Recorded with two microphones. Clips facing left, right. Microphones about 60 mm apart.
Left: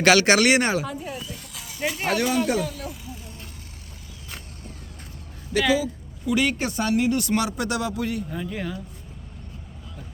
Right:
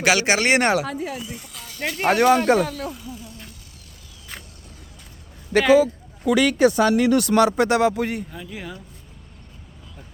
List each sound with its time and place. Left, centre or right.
0.0 s speech: centre
0.4 s speech: right
1.5 s snake: centre
2.0 s speech: right
5.5 s speech: right
6.2 s speech: right
7.3 s speech: right
8.3 s speech: centre